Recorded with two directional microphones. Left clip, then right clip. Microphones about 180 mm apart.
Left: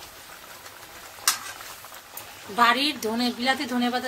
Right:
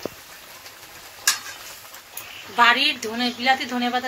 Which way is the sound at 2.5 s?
90° left.